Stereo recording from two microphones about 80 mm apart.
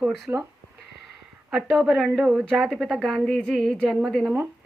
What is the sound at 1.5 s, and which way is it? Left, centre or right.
A woman's voice, centre.